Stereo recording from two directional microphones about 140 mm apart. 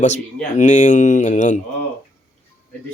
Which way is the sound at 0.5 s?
60° left (ahead or behind).